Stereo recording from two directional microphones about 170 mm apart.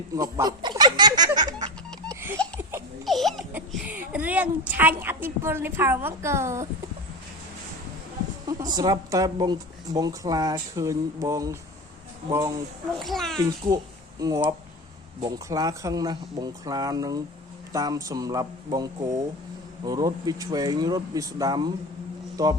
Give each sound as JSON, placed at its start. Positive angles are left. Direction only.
{"t": 0.2, "sound": "speech", "side_deg": -20}
{"t": 1.5, "sound": "laughter", "side_deg": -25}
{"t": 3.1, "sound": "crying", "side_deg": 0}
{"t": 3.8, "sound": "a woman's voice", "side_deg": -10}
{"t": 8.4, "sound": "speech", "side_deg": -20}
{"t": 13.0, "sound": "a child's voice", "side_deg": 0}
{"t": 14.2, "sound": "speech", "side_deg": -20}